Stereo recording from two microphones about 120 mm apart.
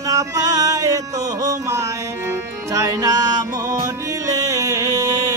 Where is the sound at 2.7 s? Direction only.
30° right (ahead or behind).